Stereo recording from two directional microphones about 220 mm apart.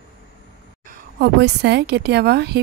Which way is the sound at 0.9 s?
50° right (ahead or behind).